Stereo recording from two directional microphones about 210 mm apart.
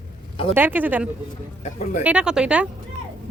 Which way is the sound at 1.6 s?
35° left (ahead or behind).